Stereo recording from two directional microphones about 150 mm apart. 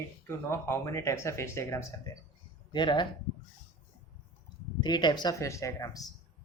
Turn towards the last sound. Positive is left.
turn(degrees=20)  # may be behind; listen again after turning